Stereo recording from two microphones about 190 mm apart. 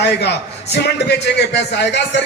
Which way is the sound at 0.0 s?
65° left (ahead or behind).